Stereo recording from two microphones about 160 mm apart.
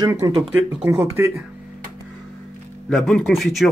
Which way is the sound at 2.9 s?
Centre (ahead or behind).